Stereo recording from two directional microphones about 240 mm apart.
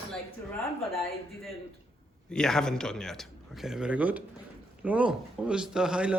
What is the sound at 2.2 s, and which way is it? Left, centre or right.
A man's voice, centre.